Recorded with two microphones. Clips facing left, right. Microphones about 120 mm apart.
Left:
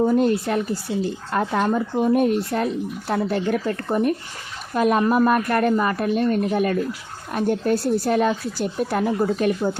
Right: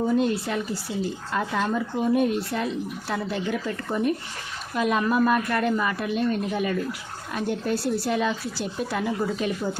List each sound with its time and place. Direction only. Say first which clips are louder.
0.0 s speech: left 5 dB; 50° left (ahead or behind)